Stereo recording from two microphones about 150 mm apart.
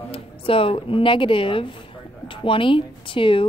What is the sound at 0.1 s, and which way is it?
A woman's voice, 35° left (ahead or behind).